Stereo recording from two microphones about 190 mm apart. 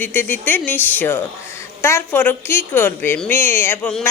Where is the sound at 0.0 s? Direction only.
10° left (ahead or behind).